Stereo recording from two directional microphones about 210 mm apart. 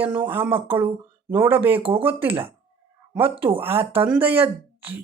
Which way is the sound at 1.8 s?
25° right (ahead or behind).